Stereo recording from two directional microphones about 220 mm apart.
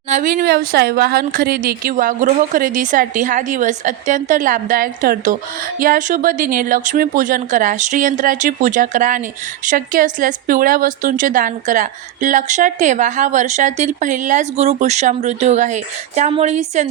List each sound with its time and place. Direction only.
0.1 s a woman's voice: 40° right (ahead or behind)